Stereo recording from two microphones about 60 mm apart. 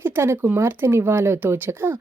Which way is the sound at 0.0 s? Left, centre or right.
Right.